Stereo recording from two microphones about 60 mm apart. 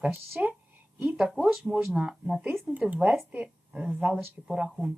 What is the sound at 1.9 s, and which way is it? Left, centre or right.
Speech, centre.